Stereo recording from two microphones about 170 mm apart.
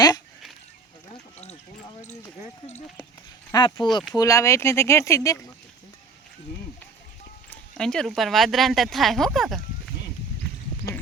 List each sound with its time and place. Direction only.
3.5 s speech: 30° left (ahead or behind)
7.5 s speech: 5° left (ahead or behind)